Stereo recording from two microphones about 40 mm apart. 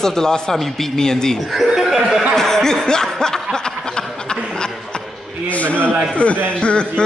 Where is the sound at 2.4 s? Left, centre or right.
Centre.